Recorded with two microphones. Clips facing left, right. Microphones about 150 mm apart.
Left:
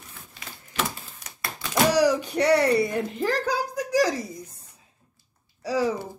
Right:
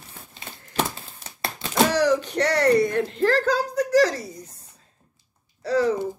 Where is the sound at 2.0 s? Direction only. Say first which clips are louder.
Even; 10° left (ahead or behind).